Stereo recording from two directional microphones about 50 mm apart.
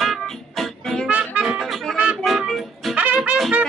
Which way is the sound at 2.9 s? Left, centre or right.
Right.